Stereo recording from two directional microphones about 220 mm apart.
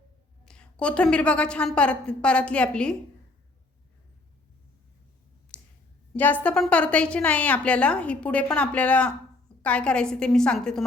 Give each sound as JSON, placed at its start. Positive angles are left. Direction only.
{"t": 0.4, "sound": "a woman's voice", "side_deg": 5}
{"t": 5.5, "sound": "clicking", "side_deg": 5}
{"t": 6.1, "sound": "a woman's voice", "side_deg": 5}